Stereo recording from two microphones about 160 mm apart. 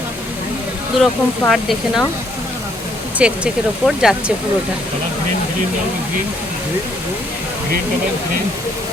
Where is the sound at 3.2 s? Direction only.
5° right (ahead or behind).